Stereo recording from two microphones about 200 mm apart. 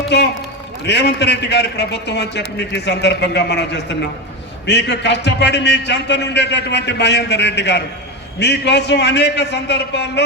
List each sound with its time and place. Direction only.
0.1 s a man's voice: 60° left (ahead or behind)